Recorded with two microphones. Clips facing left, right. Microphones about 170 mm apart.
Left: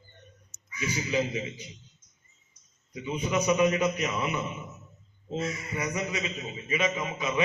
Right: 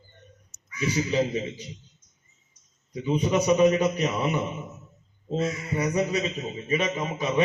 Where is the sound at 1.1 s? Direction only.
35° right (ahead or behind).